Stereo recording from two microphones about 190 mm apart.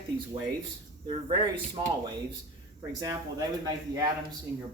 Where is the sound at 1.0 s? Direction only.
25° right (ahead or behind).